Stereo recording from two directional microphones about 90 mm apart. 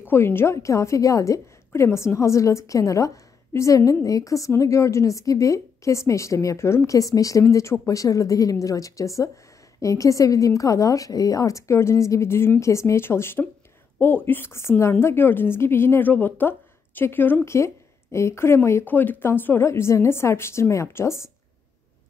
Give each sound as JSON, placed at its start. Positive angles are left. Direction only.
{"t": 0.1, "sound": "a woman's voice", "side_deg": 25}